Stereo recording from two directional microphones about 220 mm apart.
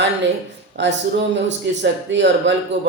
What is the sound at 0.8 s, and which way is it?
A man's voice, 55° right (ahead or behind).